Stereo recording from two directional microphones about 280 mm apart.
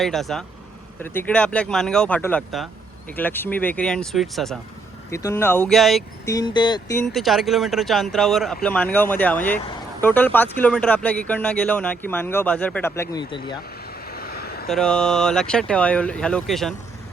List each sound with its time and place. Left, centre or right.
0.0 s speech: centre
6.2 s speech: centre
14.1 s vehicle: left
14.7 s speech: centre